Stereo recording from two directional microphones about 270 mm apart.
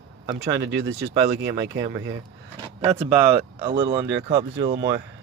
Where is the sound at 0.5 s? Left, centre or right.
Right.